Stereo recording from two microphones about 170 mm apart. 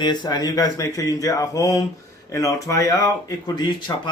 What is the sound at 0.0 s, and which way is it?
Speech, 25° left (ahead or behind).